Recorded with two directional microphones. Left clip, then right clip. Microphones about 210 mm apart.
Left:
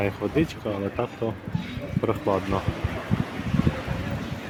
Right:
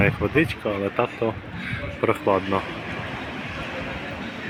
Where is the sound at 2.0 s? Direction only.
5° right (ahead or behind).